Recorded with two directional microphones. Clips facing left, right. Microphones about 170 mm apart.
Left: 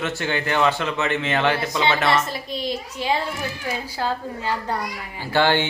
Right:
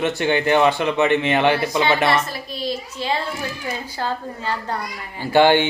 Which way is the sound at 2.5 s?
15° left (ahead or behind).